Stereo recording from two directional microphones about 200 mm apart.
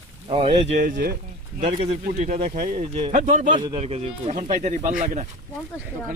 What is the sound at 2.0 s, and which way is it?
Speech, 45° right (ahead or behind).